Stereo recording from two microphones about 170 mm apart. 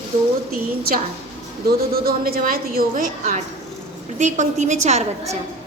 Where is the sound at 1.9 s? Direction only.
60° right (ahead or behind).